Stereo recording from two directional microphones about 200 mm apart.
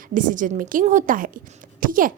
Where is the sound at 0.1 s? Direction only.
40° right (ahead or behind).